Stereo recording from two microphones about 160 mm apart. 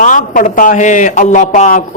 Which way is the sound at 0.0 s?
55° left (ahead or behind).